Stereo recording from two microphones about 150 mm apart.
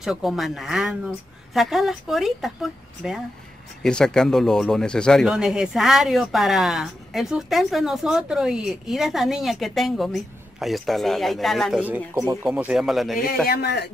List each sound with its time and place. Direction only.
0.0 s a man's voice: centre (ahead or behind)
12.1 s speech: 25° right (ahead or behind)
12.4 s a man's voice: 5° right (ahead or behind)